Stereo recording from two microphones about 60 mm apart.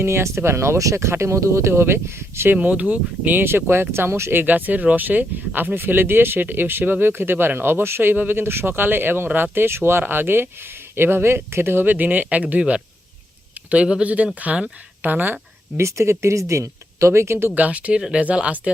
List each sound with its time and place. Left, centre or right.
0.0 s speech: right
2.6 s speech: right
3.4 s speech: right
15.8 s speech: right
17.5 s speech: right